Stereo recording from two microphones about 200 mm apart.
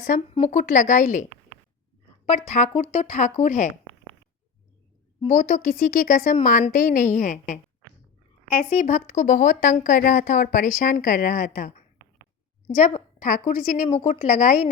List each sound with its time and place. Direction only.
0.0 s speech: 40° left (ahead or behind)
2.5 s speech: 35° left (ahead or behind)
5.2 s speech: 35° left (ahead or behind)
8.7 s speech: 35° left (ahead or behind)